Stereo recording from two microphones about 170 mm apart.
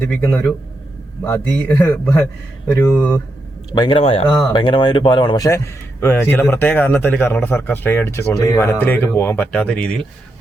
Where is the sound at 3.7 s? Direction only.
25° left (ahead or behind).